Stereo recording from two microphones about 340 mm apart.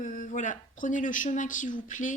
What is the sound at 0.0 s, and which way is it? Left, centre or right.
A woman's voice, left.